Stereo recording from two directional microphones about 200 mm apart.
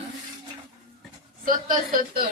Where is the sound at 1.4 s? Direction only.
45° right (ahead or behind).